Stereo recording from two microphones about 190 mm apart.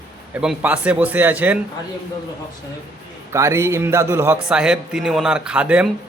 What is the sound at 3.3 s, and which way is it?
A man's voice, 15° right (ahead or behind).